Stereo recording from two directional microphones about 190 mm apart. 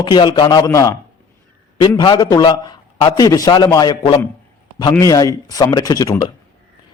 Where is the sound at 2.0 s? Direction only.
20° left (ahead or behind).